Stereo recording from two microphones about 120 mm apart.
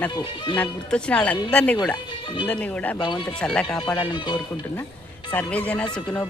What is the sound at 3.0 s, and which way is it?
Speech, 40° left (ahead or behind).